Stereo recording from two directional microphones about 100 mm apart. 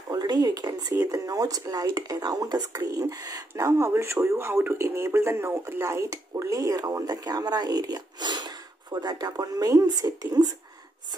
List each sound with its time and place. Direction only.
0.1 s speech: 40° right (ahead or behind)